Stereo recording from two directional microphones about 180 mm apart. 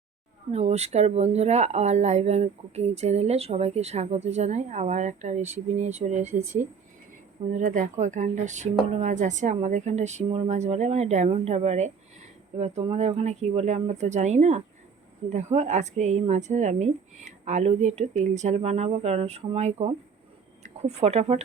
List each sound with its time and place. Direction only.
0.5 s a woman's voice: 35° right (ahead or behind)